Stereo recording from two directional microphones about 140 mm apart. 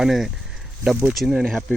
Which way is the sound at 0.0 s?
Centre (ahead or behind).